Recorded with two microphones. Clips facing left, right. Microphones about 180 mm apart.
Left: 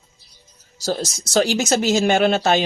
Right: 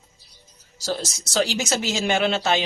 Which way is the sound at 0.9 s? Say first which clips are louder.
Left 4 dB; 45° left (ahead or behind).